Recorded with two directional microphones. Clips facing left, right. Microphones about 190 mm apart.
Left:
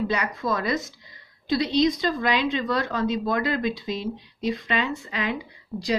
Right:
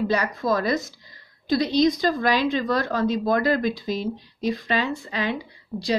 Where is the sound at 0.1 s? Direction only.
40° right (ahead or behind).